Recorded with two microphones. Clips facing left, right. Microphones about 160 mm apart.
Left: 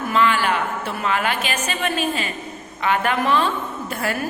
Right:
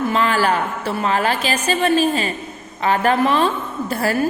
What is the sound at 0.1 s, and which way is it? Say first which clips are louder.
A woman's voice: left 2 dB; 40° right (ahead or behind).